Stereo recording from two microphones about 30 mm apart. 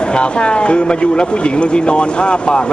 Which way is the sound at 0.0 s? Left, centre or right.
Left.